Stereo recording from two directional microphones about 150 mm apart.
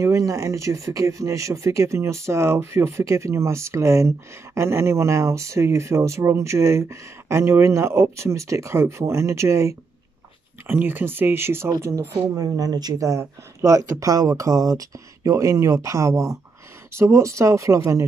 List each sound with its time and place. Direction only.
0.0 s speech: 20° right (ahead or behind)